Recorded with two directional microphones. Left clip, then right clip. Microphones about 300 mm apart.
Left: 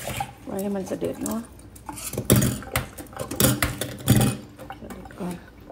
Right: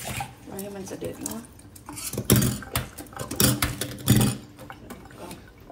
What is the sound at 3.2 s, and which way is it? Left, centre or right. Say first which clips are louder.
Patter: left 2 dB; centre.